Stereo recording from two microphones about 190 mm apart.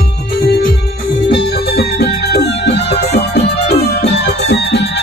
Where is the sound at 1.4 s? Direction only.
60° left (ahead or behind).